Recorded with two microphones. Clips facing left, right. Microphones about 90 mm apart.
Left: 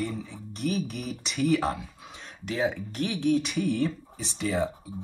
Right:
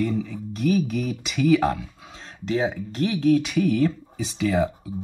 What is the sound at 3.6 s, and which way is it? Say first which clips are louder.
Speech: right 6 dB; 70° right (ahead or behind).